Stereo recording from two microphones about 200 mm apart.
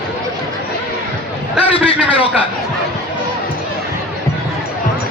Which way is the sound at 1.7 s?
25° left (ahead or behind).